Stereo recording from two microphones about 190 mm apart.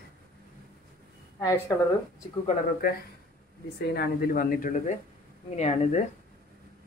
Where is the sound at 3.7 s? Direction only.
55° left (ahead or behind); by 6.0 s 35° left (ahead or behind).